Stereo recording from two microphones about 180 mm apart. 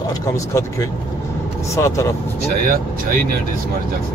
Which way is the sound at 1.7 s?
15° left (ahead or behind).